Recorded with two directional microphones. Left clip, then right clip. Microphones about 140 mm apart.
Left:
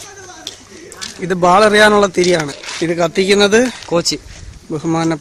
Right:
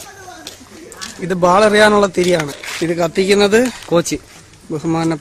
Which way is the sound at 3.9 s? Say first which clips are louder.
Right 2 dB; 50° right (ahead or behind).